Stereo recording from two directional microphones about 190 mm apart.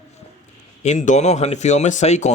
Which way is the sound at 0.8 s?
40° left (ahead or behind).